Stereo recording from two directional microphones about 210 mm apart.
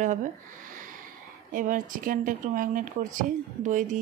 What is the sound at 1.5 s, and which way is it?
Speech, 40° right (ahead or behind).